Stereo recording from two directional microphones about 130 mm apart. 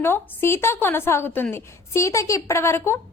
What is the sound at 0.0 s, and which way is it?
A woman's voice, 20° left (ahead or behind).